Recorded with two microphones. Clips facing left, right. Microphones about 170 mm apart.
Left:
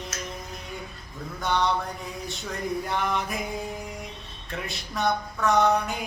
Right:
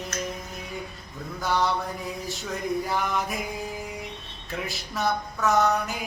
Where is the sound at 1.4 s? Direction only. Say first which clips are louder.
Even; centre (ahead or behind).